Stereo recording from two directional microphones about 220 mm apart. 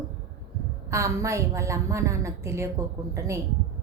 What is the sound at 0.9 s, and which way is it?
A woman's voice, 15° right (ahead or behind).